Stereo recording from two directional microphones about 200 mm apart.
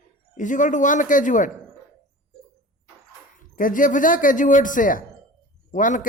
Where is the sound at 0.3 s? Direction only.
40° left (ahead or behind).